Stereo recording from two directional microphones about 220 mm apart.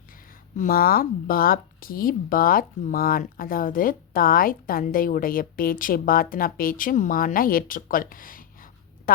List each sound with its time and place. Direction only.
0.5 s speech: 40° left (ahead or behind)